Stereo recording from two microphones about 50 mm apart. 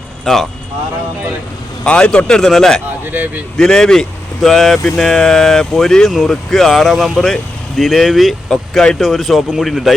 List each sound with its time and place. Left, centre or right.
0.3 s speech: centre
1.9 s speech: centre
3.1 s speech: right
3.6 s speech: centre
4.4 s speech: centre
8.4 s speech: centre
9.0 s speech: centre